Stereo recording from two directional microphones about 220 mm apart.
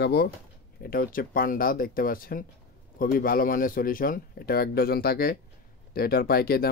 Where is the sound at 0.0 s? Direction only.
45° left (ahead or behind).